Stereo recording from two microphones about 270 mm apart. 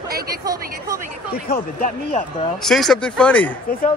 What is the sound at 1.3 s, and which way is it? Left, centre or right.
Speech, left.